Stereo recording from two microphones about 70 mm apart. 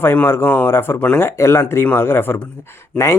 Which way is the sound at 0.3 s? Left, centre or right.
Left.